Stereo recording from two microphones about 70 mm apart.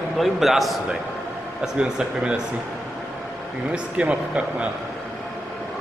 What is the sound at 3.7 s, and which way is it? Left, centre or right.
Speech, centre.